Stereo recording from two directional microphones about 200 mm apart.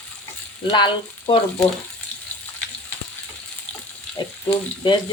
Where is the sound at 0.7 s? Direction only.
25° left (ahead or behind).